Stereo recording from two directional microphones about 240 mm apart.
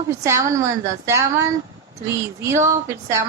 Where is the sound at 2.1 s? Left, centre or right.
Centre.